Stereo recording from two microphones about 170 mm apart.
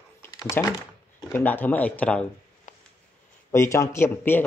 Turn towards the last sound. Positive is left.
turn(degrees=15)  # may be behind; listen again after turning